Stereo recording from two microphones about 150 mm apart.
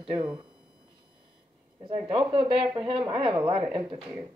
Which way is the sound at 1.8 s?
30° right (ahead or behind).